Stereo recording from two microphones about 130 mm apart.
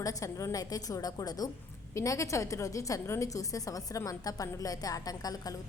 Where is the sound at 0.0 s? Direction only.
25° left (ahead or behind).